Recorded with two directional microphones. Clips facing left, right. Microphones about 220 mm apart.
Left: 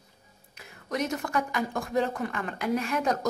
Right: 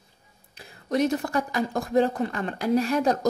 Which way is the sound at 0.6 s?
30° right (ahead or behind).